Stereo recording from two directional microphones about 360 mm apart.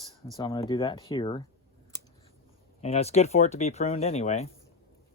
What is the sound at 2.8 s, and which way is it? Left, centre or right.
Speech, centre.